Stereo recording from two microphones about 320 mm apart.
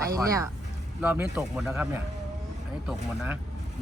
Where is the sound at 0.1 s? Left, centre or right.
Centre.